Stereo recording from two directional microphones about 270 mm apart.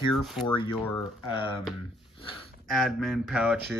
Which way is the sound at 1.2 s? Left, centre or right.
Centre.